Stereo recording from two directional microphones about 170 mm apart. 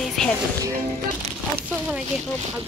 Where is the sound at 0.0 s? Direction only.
Centre (ahead or behind).